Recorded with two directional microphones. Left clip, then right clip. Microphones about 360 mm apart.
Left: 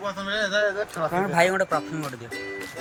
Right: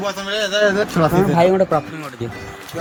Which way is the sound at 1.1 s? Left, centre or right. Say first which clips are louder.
Right 5 dB; left.